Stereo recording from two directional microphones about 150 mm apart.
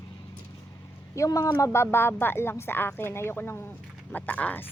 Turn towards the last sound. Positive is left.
turn(degrees=10)  # may be behind; listen again after turning